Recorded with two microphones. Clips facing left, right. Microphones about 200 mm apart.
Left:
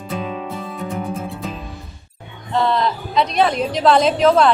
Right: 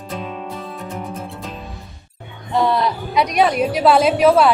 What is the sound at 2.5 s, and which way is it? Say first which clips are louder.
A woman's voice: right 1 dB; 10° right (ahead or behind).